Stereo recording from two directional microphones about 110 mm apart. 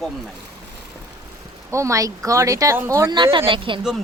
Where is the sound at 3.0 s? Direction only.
45° right (ahead or behind).